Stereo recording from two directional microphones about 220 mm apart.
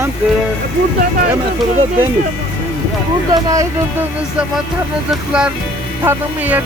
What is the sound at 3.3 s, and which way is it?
Speech, 15° right (ahead or behind).